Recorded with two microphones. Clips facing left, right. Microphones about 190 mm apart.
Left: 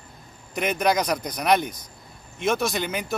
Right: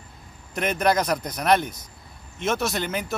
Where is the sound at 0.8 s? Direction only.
5° right (ahead or behind).